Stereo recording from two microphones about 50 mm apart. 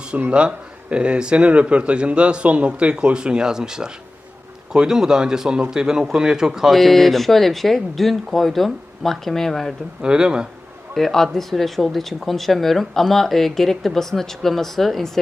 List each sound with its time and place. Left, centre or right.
0.2 s speech: right
6.7 s speech: centre
10.0 s speech: centre
10.9 s speech: centre